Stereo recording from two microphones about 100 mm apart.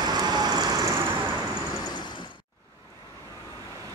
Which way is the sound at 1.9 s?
45° left (ahead or behind).